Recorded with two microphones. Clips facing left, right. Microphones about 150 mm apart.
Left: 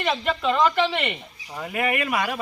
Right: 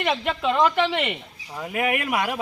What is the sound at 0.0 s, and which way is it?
A man's voice, 5° right (ahead or behind).